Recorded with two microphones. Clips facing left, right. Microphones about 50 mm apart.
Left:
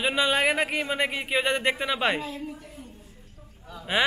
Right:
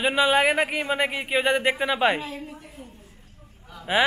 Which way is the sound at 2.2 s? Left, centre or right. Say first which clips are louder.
Even; right.